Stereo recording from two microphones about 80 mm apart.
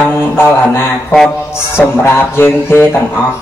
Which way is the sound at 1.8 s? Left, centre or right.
Left.